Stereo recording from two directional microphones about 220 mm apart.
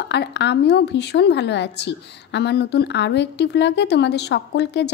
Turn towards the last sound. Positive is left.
turn(degrees=50)  # may be behind; listen again after turning